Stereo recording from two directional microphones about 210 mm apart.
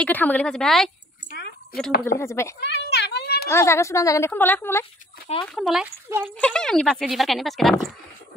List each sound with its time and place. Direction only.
0.0 s speech: 10° left (ahead or behind)
1.3 s a sound: 45° left (ahead or behind)
2.1 s speech: 15° left (ahead or behind)
2.6 s a sound: 55° left (ahead or behind)
3.4 s speech: 10° left (ahead or behind); by 6.2 s 5° right (ahead or behind)
6.2 s speech: 5° left (ahead or behind)